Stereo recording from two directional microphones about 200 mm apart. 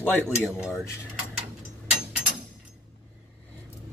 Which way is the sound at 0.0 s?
10° left (ahead or behind).